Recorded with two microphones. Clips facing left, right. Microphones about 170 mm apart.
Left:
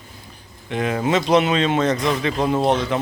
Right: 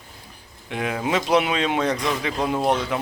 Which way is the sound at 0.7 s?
5° right (ahead or behind).